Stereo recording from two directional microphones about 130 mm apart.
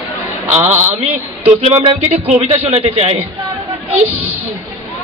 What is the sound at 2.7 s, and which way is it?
Speech, 50° right (ahead or behind).